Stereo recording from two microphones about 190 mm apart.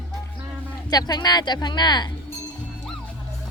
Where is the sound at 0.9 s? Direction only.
20° left (ahead or behind).